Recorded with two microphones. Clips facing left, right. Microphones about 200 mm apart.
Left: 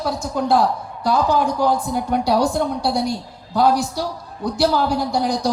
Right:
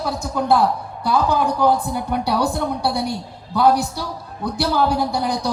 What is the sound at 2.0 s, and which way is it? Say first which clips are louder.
Speech: left 2 dB; 50° left (ahead or behind).